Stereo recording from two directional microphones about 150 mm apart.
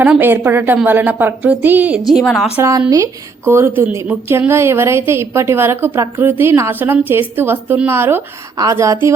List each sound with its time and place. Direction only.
0.0 s a woman's voice: 10° right (ahead or behind)
2.0 s speech: centre (ahead or behind)
2.6 s a woman's voice: 20° right (ahead or behind)